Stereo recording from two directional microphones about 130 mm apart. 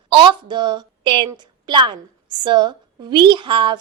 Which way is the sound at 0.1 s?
40° right (ahead or behind).